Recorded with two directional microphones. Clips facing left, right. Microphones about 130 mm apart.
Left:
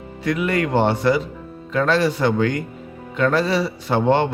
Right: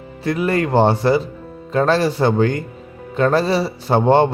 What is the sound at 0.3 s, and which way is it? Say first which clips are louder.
Speech: right 2 dB; 35° right (ahead or behind).